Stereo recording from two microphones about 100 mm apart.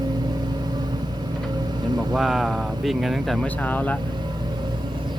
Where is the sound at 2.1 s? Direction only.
5° right (ahead or behind).